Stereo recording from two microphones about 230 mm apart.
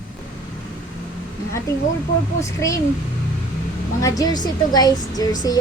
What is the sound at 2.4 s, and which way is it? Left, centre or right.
Speech, centre.